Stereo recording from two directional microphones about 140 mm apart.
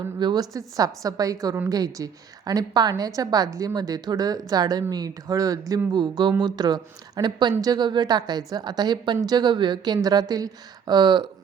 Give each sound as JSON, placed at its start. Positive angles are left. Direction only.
{"t": 0.2, "sound": "a woman's voice", "side_deg": -30}